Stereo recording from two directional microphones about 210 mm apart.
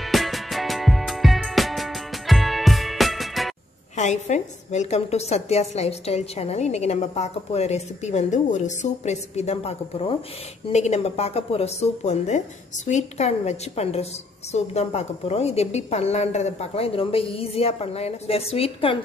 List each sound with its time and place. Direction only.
0.0 s music: centre (ahead or behind)
3.9 s a woman's voice: 35° left (ahead or behind)